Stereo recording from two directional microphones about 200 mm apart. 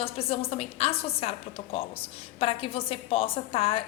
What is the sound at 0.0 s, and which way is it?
A woman's voice, 30° left (ahead or behind).